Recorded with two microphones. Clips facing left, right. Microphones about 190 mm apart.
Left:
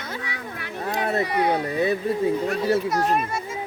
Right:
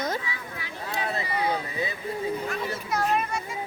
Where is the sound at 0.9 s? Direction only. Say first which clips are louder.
Left 6 dB; 60° left (ahead or behind).